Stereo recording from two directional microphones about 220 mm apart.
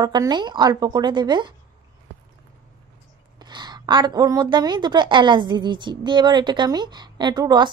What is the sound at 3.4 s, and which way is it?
Speech, 20° right (ahead or behind).